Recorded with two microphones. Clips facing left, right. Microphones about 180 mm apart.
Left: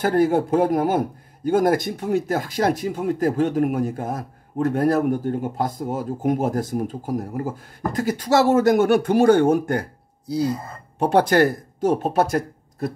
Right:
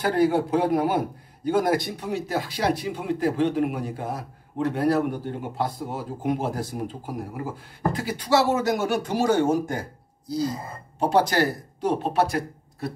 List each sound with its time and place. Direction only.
0.0 s a man's voice: 50° left (ahead or behind)